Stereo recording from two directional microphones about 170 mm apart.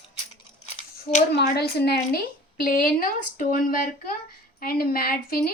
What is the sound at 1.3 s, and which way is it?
Speech, 75° left (ahead or behind).